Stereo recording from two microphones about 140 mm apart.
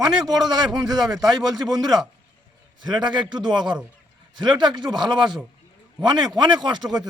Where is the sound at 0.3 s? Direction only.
30° right (ahead or behind).